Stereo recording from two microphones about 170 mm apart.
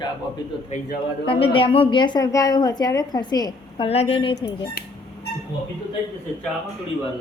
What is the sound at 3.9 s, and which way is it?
Speech, 35° left (ahead or behind).